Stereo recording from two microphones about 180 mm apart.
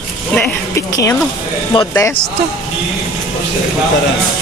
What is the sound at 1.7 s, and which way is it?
Speech, 20° left (ahead or behind).